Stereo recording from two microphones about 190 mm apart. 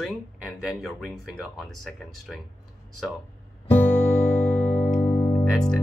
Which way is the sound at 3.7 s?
10° left (ahead or behind).